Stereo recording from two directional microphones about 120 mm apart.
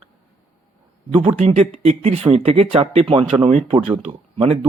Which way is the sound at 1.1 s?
55° right (ahead or behind).